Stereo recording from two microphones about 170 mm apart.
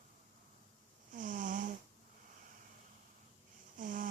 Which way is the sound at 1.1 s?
50° right (ahead or behind).